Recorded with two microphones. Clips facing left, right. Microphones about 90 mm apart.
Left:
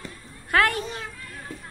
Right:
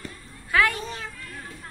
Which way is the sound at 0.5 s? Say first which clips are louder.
Left 1 dB; 50° left (ahead or behind).